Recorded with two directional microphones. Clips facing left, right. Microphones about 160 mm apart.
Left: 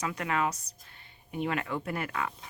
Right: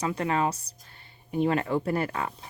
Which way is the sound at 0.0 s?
30° right (ahead or behind).